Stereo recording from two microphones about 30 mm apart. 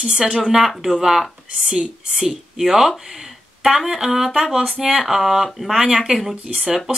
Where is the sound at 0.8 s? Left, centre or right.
Centre.